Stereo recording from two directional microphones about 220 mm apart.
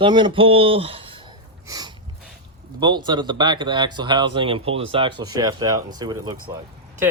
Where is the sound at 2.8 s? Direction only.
20° right (ahead or behind).